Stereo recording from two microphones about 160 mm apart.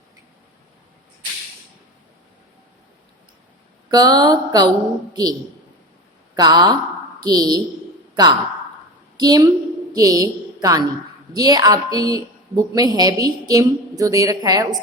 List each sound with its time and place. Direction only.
3.8 s a woman's voice: 25° right (ahead or behind)
6.3 s a woman's voice: 25° right (ahead or behind)